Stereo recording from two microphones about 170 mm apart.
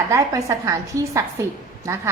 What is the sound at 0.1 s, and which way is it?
A woman's voice, 20° right (ahead or behind).